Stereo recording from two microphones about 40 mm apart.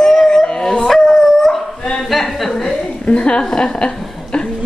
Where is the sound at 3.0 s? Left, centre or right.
Left.